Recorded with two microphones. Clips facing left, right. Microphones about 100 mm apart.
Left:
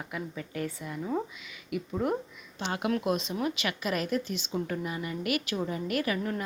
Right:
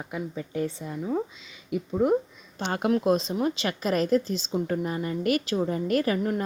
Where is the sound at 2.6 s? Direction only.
40° right (ahead or behind).